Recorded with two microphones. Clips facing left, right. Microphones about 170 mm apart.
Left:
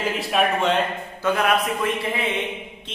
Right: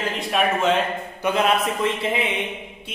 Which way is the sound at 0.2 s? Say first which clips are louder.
Right 1 dB; centre (ahead or behind).